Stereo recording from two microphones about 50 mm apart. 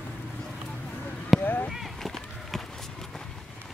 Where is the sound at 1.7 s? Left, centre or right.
Centre.